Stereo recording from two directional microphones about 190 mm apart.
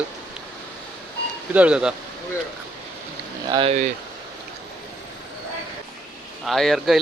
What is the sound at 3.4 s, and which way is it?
Speech, 25° right (ahead or behind).